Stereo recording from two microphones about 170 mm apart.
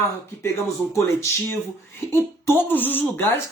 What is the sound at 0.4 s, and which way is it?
Speech, 15° left (ahead or behind).